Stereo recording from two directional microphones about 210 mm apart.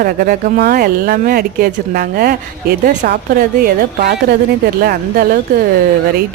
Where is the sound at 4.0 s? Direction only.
50° right (ahead or behind).